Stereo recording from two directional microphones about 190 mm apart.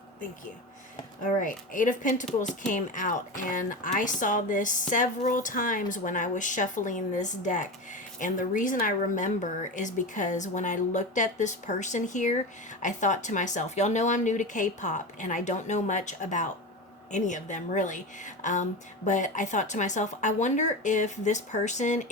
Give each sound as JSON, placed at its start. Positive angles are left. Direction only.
{"t": 1.2, "sound": "a woman's voice", "side_deg": 45}